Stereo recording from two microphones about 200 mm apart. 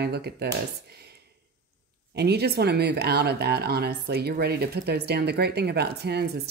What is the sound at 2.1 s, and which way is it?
Speech, 55° right (ahead or behind).